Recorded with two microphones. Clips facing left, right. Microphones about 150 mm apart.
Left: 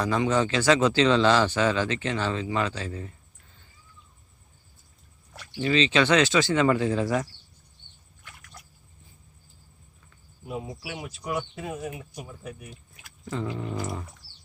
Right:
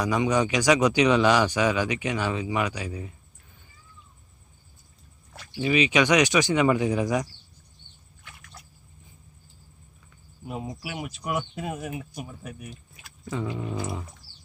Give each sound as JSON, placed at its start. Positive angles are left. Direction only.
{"t": 0.0, "sound": "speech", "side_deg": -15}
{"t": 5.5, "sound": "speech", "side_deg": -10}
{"t": 10.9, "sound": "speech", "side_deg": -60}
{"t": 13.3, "sound": "speech", "side_deg": -10}